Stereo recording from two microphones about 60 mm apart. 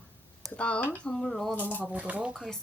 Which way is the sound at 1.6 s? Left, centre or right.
Left.